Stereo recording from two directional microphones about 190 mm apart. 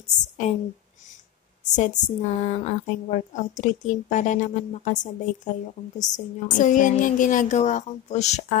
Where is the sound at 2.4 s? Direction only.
35° left (ahead or behind).